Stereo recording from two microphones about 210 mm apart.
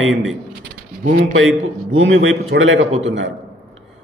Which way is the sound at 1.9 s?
70° right (ahead or behind).